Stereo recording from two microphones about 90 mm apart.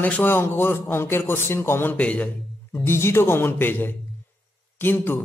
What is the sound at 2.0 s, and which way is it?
Speech, 10° left (ahead or behind).